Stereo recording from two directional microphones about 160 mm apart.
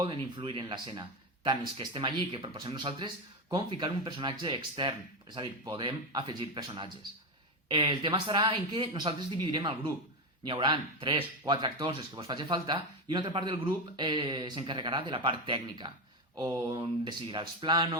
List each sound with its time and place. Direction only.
0.0 s speech: 30° right (ahead or behind)